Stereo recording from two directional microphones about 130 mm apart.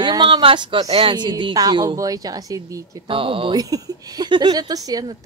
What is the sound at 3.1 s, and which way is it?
Speech, 40° right (ahead or behind).